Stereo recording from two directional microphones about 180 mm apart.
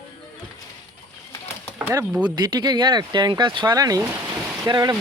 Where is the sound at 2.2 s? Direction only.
25° right (ahead or behind).